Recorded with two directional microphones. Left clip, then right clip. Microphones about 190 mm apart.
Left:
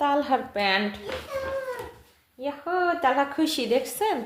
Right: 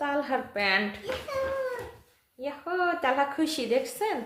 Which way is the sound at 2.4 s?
20° left (ahead or behind).